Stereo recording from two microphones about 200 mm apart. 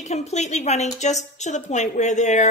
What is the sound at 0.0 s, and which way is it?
A woman's voice, 35° left (ahead or behind).